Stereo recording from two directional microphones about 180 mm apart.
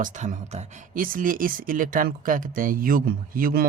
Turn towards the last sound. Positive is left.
turn(degrees=-55)  # may be behind; listen again after turning